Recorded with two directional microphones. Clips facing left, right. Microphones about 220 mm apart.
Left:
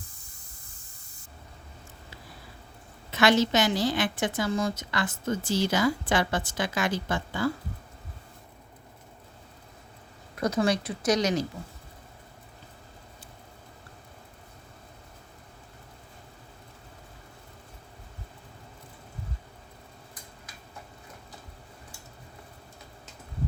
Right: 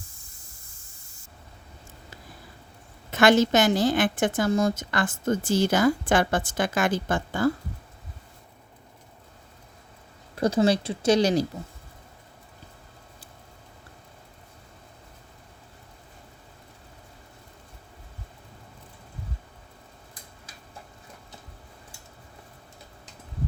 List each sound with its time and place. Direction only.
3.1 s a woman's voice: 50° right (ahead or behind)
10.3 s speech: 30° right (ahead or behind)